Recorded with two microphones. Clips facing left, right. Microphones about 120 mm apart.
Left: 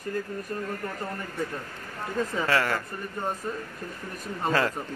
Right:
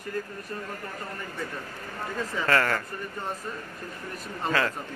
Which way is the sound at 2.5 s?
15° left (ahead or behind).